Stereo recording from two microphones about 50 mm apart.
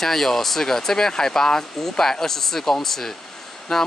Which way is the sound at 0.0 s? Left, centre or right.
Centre.